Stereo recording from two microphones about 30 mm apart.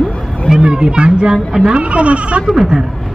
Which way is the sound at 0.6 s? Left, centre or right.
Right.